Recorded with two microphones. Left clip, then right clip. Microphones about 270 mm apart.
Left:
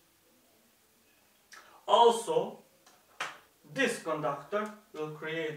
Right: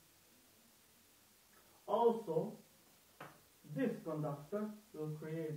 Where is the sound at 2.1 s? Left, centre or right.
Left.